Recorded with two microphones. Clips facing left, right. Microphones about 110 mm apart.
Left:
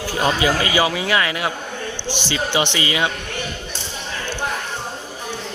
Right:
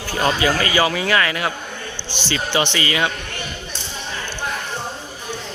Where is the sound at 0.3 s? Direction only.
20° left (ahead or behind).